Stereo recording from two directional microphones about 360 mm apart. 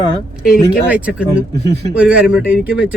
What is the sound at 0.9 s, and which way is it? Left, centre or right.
Speech, centre.